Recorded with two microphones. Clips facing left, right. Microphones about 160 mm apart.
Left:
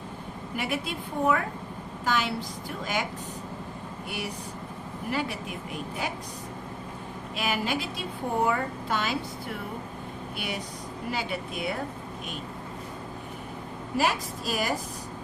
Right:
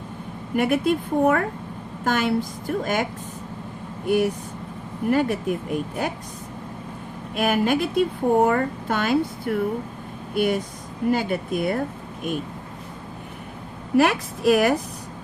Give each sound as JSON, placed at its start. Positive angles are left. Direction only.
{"t": 0.5, "sound": "a woman's voice", "side_deg": -50}
{"t": 7.3, "sound": "a woman's voice", "side_deg": -50}
{"t": 13.9, "sound": "a woman's voice", "side_deg": -65}